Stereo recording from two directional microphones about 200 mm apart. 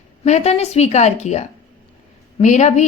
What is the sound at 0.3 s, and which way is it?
A woman's voice, 35° left (ahead or behind).